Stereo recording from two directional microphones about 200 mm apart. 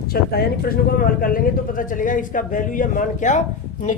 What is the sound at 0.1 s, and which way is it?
Speech, 50° left (ahead or behind).